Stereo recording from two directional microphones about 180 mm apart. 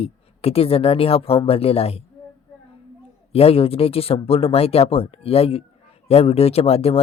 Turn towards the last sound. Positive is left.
turn(degrees=35)  # may be behind; listen again after turning